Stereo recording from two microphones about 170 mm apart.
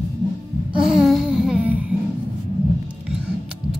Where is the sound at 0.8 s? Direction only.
5° right (ahead or behind).